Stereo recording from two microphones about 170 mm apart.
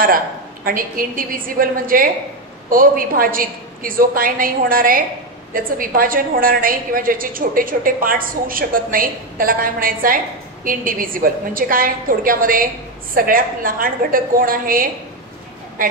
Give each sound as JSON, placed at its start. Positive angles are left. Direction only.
{"t": 0.7, "sound": "a woman's voice", "side_deg": -55}